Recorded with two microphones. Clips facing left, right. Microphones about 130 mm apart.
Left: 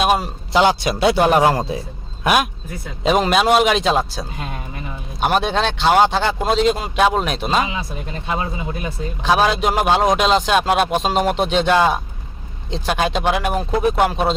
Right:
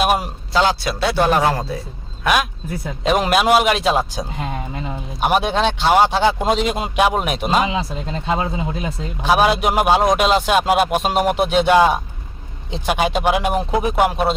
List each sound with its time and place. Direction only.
0.0 s a man's voice: 5° right (ahead or behind)
0.5 s a man's voice: 10° left (ahead or behind)
3.2 s speech: 5° right (ahead or behind)
7.7 s speech: 25° right (ahead or behind)
9.2 s speech: 10° right (ahead or behind)